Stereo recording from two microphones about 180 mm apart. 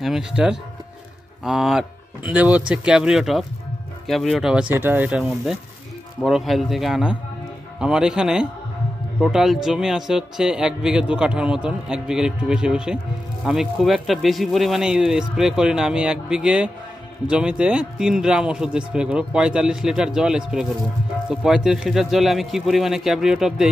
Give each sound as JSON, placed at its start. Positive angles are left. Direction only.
{"t": 0.0, "sound": "speech", "side_deg": -5}